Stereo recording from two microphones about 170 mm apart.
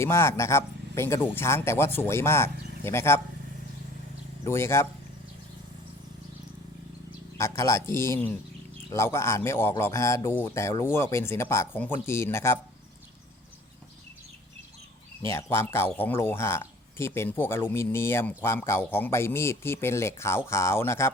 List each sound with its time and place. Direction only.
0.0 s a man's voice: 15° left (ahead or behind)
4.4 s a man's voice: 15° left (ahead or behind)
7.3 s a man's voice: 15° left (ahead or behind)
15.2 s a man's voice: 15° left (ahead or behind)